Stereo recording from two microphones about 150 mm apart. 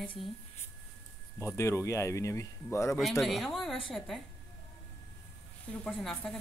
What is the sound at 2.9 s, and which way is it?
Speech, centre (ahead or behind).